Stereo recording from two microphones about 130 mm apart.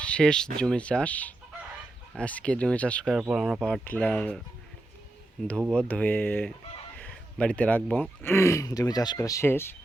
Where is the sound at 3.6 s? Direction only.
10° left (ahead or behind).